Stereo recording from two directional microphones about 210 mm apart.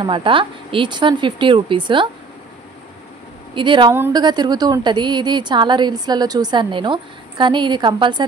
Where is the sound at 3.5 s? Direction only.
25° right (ahead or behind).